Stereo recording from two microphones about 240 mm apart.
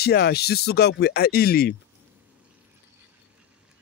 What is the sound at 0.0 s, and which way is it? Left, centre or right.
A man's voice, left.